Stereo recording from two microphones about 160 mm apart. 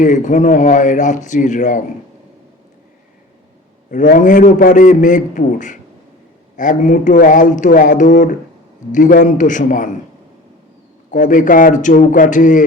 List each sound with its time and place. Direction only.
0.0 s a man's voice: 50° left (ahead or behind)
3.8 s a man's voice: 60° left (ahead or behind)
11.1 s a man's voice: 55° left (ahead or behind)